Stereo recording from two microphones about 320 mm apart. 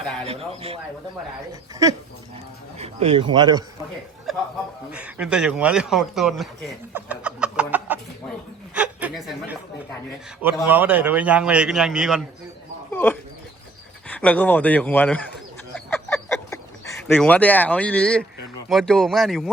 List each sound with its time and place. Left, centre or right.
0.0 s speech: centre
0.3 s speech: centre
2.7 s speech: centre
4.3 s a man's voice: centre
8.7 s chuckle: centre
10.4 s a man's voice: centre
12.9 s dog: centre
14.1 s a man's voice: centre
15.7 s a sound: centre
18.7 s a man's voice: centre